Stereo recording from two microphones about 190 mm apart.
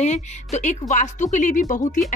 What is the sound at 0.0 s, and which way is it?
Speech, 35° left (ahead or behind).